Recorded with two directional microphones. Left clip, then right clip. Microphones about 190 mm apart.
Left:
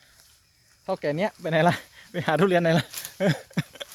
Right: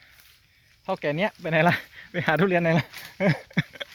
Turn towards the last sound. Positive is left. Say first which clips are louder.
# right 4 dB
turn(degrees=5)  # may be behind; listen again after turning